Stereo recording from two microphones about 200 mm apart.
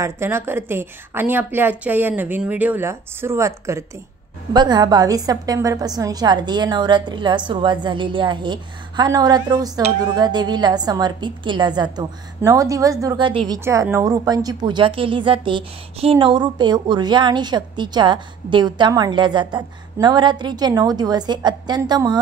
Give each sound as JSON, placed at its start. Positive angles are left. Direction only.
{"t": 0.0, "sound": "a woman's voice", "side_deg": -10}
{"t": 13.7, "sound": "a woman's voice", "side_deg": -15}